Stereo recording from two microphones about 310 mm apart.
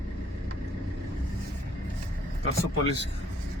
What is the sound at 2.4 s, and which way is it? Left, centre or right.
Speech, left.